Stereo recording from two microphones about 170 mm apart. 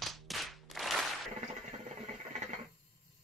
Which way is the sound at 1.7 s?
45° right (ahead or behind).